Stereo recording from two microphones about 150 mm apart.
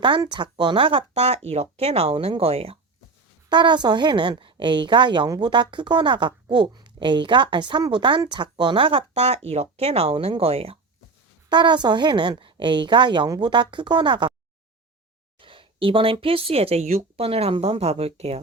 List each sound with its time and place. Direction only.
0.0 s a woman's voice: 30° right (ahead or behind)
3.5 s a woman's voice: 30° right (ahead or behind)
11.5 s a woman's voice: 30° right (ahead or behind)
15.4 s a woman's voice: 35° right (ahead or behind)